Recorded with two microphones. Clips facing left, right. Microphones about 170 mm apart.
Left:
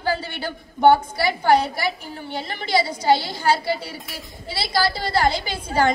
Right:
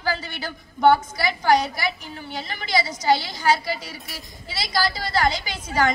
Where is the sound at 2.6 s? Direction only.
30° left (ahead or behind).